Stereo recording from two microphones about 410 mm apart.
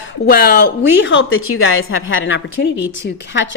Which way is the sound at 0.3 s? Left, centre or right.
Left.